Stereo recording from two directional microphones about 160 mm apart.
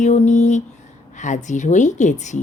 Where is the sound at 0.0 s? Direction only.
45° left (ahead or behind).